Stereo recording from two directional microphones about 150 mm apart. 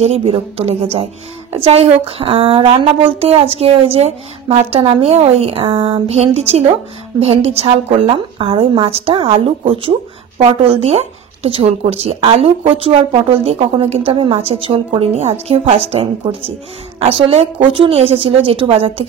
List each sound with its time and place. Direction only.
0.0 s speech: 40° right (ahead or behind)